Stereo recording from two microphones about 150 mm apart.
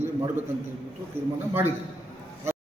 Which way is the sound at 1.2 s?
15° right (ahead or behind).